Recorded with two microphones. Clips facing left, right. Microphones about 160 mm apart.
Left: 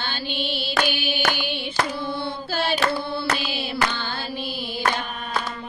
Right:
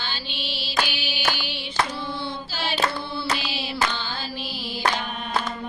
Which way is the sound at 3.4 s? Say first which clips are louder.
Left 2 dB; 50° left (ahead or behind).